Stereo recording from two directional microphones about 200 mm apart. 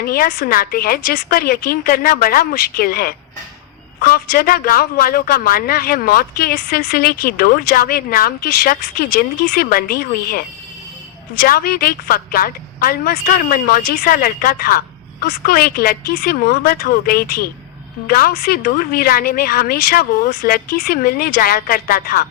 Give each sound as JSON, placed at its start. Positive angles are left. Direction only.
{"t": 0.0, "sound": "speech", "side_deg": 50}